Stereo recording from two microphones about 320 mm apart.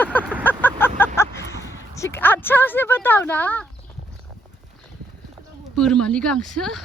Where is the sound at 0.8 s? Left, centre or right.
Centre.